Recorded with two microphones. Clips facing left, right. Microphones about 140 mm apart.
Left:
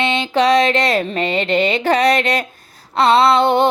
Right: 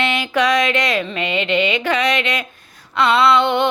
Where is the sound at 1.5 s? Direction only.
35° left (ahead or behind).